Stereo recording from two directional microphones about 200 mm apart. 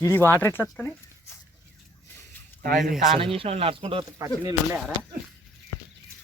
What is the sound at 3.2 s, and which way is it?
Speech, 25° right (ahead or behind).